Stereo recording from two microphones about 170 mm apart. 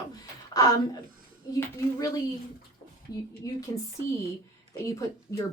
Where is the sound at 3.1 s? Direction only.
20° left (ahead or behind).